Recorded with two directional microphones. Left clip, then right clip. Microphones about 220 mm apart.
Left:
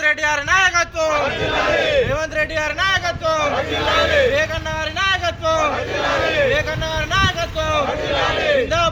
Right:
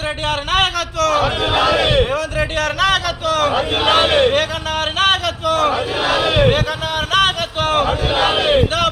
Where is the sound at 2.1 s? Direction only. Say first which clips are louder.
Right 1 dB; 15° left (ahead or behind).